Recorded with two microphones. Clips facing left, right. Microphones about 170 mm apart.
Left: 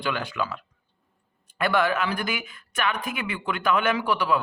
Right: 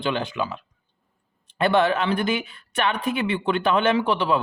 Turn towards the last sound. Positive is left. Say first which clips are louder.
# right 3 dB
turn(degrees=-25)  # may be behind; listen again after turning